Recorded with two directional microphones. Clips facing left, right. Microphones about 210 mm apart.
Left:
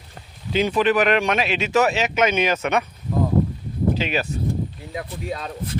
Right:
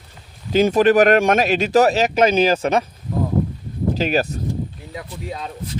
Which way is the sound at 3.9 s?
40° right (ahead or behind).